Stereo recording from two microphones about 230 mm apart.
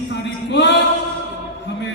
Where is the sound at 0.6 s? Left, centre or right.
Left.